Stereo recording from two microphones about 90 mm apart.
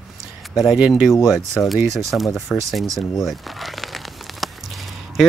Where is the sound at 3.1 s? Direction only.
Centre (ahead or behind).